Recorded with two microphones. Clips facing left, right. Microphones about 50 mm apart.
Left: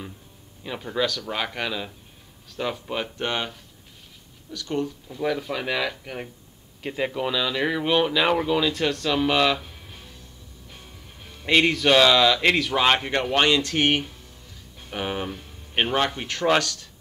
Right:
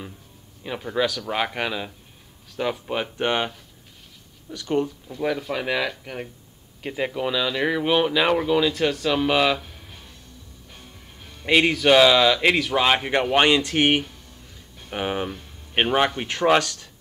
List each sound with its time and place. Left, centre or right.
0.7 s speech: centre; by 4.9 s right
5.0 s speech: centre
9.6 s music: centre
11.4 s speech: centre; by 16.9 s right